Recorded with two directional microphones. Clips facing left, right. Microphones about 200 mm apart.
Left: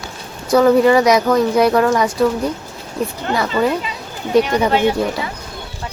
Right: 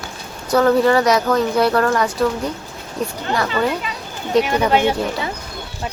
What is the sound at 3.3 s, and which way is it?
Speech, 10° left (ahead or behind).